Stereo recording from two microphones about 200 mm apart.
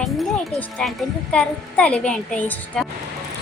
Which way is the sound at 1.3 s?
5° left (ahead or behind).